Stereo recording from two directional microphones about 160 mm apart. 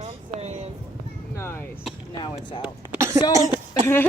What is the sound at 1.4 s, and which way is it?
Speech, 15° left (ahead or behind).